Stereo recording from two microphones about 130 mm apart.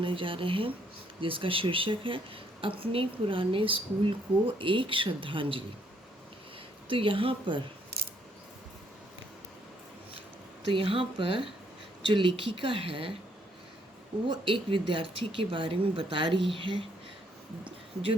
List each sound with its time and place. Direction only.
0.0 s a woman's voice: 40° right (ahead or behind)
6.8 s speech: 40° right (ahead or behind)
10.7 s a woman's voice: 40° right (ahead or behind)
14.3 s speech: 40° right (ahead or behind)